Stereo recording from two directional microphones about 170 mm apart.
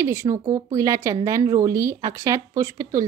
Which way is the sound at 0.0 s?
15° right (ahead or behind).